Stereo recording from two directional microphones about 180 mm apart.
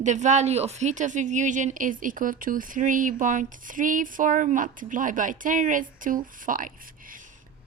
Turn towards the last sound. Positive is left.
turn(degrees=-50)  # may be behind; listen again after turning